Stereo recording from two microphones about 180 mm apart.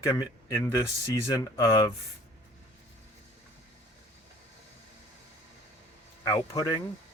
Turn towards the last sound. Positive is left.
turn(degrees=20)  # may be behind; listen again after turning